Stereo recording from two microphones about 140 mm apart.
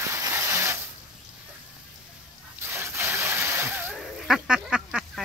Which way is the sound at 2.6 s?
15° right (ahead or behind).